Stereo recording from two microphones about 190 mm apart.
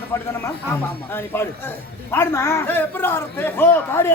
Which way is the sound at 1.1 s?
10° left (ahead or behind).